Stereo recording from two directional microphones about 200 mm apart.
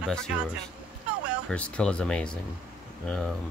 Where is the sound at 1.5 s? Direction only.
5° left (ahead or behind).